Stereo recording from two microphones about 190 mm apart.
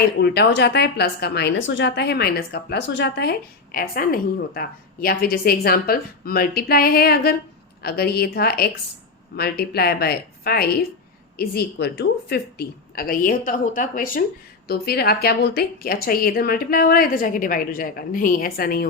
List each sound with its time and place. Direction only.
0.2 s a woman's voice: 60° left (ahead or behind)